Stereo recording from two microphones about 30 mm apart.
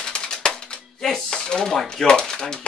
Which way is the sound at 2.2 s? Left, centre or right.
Left.